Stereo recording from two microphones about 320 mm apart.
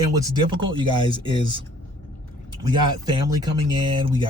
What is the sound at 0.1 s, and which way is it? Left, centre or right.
Speech, centre.